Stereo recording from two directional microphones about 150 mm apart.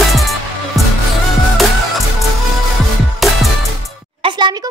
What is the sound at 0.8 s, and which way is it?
Music, centre (ahead or behind).